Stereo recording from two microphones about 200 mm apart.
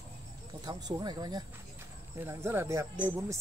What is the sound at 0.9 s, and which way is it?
Speech, 20° right (ahead or behind).